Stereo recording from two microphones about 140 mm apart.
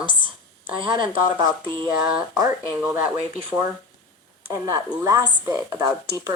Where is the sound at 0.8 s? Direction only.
35° right (ahead or behind).